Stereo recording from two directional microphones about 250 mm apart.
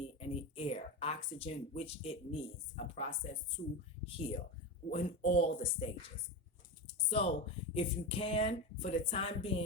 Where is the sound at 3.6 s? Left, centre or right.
Left.